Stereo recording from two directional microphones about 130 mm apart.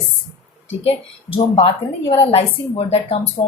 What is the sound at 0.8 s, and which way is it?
Speech, 45° left (ahead or behind).